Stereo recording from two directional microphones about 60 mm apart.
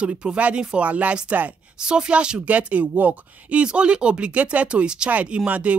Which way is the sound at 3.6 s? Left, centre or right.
Centre.